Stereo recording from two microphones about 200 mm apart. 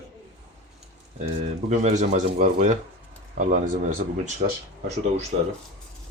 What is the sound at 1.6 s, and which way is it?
Speech, 35° right (ahead or behind).